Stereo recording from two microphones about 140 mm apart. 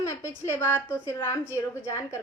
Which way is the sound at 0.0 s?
20° left (ahead or behind).